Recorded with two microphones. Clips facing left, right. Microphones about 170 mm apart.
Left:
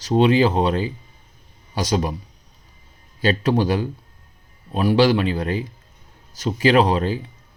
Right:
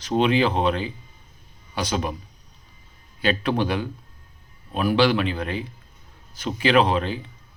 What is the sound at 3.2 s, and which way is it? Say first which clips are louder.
Speech: left 3 dB; 40° left (ahead or behind).